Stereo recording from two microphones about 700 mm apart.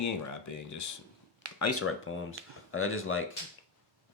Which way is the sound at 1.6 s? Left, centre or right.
Centre.